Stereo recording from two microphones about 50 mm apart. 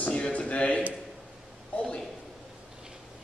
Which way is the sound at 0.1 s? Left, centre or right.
Left.